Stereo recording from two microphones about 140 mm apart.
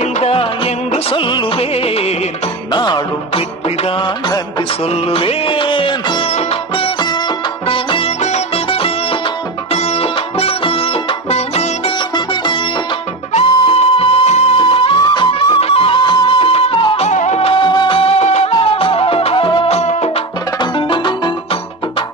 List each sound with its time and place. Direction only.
0.0 s music: 45° left (ahead or behind)
2.7 s music: 30° left (ahead or behind)
3.6 s music: 45° left (ahead or behind)
13.3 s music: 45° left (ahead or behind)
19.8 s music: 55° left (ahead or behind)
20.5 s music: 35° left (ahead or behind)